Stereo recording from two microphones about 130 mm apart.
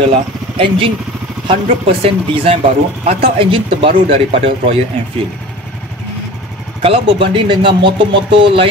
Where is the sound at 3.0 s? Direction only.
50° right (ahead or behind).